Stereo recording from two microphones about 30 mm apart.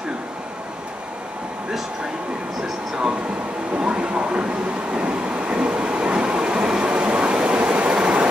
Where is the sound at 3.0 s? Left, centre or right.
Right.